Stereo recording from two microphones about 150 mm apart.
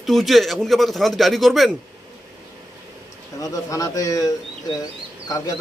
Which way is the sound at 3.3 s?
20° left (ahead or behind).